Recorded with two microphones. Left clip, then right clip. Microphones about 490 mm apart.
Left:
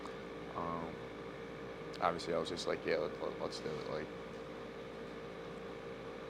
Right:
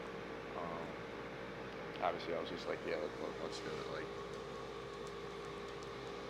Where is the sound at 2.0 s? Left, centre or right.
Left.